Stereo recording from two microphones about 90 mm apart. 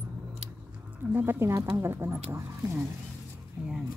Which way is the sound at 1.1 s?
25° right (ahead or behind).